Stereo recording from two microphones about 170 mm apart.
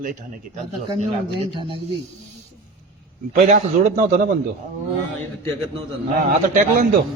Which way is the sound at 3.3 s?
45° right (ahead or behind).